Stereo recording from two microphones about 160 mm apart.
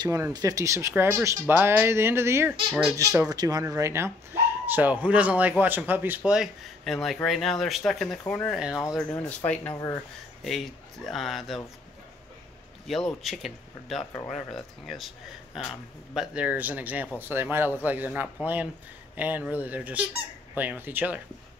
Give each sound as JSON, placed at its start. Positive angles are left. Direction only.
{"t": 0.0, "sound": "speech", "side_deg": -20}
{"t": 12.8, "sound": "speech", "side_deg": 0}